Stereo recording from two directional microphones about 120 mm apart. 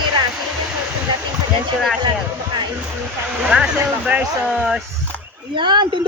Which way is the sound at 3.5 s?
15° right (ahead or behind).